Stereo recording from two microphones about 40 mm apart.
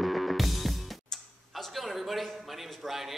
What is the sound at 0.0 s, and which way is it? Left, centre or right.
Music, centre.